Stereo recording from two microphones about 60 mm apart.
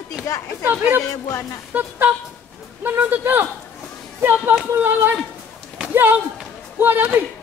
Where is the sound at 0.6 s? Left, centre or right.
Right.